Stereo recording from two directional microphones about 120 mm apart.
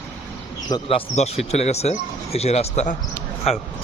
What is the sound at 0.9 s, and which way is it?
Speech, 55° left (ahead or behind).